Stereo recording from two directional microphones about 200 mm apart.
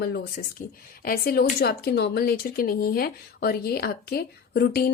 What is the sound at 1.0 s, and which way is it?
Speech, 45° left (ahead or behind).